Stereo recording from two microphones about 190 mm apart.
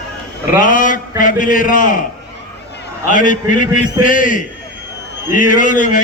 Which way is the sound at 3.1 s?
45° left (ahead or behind).